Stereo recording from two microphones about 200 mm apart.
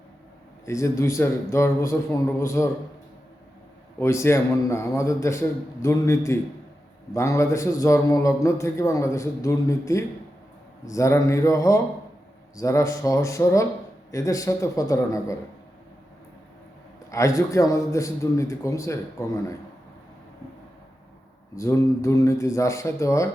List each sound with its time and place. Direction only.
0.6 s a man's voice: 15° left (ahead or behind)
4.0 s a man's voice: 15° left (ahead or behind)
17.1 s a man's voice: 15° left (ahead or behind)
21.5 s a man's voice: 15° left (ahead or behind)